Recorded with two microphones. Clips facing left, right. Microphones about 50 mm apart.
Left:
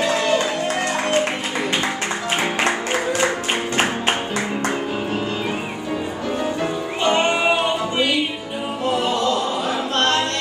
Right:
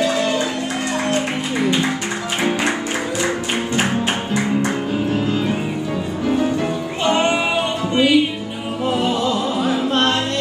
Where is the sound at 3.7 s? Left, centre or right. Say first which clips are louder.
Right 1 dB; left.